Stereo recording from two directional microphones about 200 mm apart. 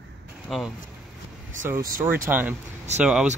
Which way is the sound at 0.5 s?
Centre (ahead or behind).